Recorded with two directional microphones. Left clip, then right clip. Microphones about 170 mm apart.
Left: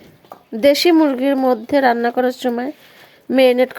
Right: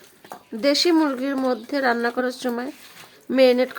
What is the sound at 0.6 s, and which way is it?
Speech, 25° left (ahead or behind).